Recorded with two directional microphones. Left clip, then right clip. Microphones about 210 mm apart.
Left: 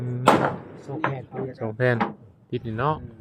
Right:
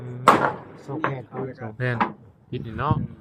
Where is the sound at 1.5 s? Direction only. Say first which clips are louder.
Left 3 dB; 20° left (ahead or behind).